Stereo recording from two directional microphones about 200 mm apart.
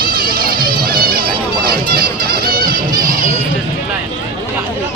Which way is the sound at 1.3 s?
25° right (ahead or behind).